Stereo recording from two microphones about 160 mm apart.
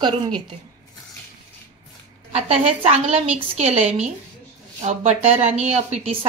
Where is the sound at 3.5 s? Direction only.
45° right (ahead or behind).